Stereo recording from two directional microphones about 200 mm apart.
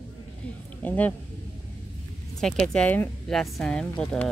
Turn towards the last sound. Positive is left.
turn(degrees=5)  # may be behind; listen again after turning